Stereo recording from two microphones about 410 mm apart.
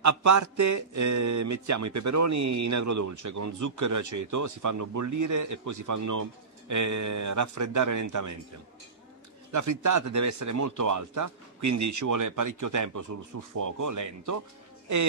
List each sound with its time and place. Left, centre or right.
0.0 s speech: right
9.5 s speech: right